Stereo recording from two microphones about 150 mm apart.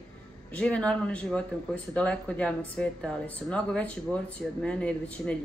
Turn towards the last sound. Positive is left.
turn(degrees=5)  # may be behind; listen again after turning